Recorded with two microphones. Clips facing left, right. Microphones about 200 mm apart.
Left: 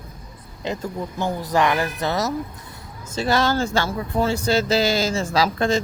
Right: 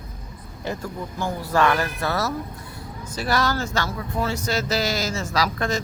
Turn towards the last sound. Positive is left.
turn(degrees=25)  # may be behind; listen again after turning